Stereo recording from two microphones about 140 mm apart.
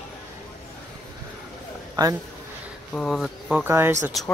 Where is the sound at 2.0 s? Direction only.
30° right (ahead or behind).